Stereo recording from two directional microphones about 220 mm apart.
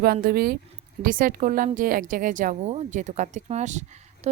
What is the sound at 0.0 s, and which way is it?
A woman's voice, 45° right (ahead or behind).